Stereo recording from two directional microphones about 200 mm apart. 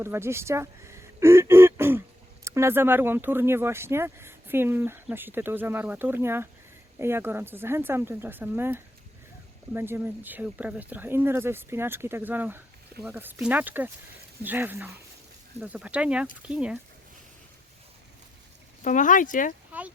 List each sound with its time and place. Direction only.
0.0 s speech: 10° right (ahead or behind)
18.9 s speech: 40° left (ahead or behind)